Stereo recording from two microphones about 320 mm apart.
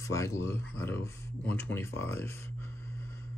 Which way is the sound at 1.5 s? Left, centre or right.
Centre.